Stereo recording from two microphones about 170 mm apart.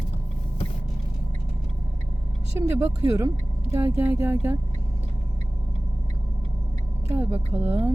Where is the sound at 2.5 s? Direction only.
20° right (ahead or behind).